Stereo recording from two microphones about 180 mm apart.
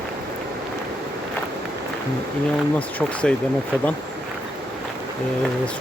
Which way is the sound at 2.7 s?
5° left (ahead or behind).